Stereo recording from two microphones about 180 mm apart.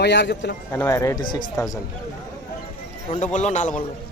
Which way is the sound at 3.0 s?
40° left (ahead or behind).